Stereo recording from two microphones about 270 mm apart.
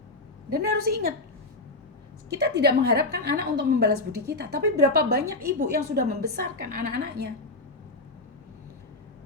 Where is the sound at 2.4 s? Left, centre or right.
Right.